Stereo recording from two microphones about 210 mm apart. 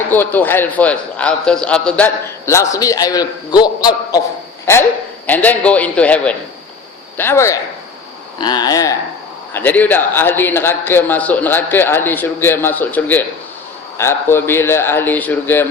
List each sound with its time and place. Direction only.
0.1 s a man's voice: 10° left (ahead or behind)